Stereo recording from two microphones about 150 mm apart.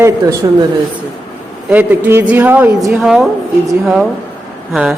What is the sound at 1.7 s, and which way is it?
A woman's voice, 10° right (ahead or behind).